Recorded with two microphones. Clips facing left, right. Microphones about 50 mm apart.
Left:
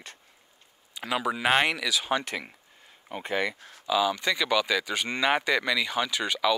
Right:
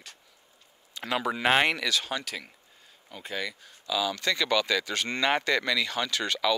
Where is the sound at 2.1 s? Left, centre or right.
Left.